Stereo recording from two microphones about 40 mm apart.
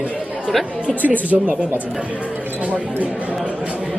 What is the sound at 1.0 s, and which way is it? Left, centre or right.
Speech, right.